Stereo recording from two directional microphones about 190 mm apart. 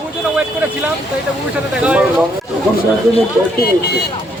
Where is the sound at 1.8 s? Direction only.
5° right (ahead or behind).